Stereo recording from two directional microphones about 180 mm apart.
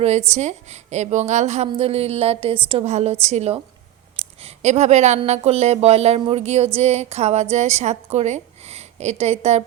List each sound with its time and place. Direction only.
0.0 s a woman's voice: 40° right (ahead or behind)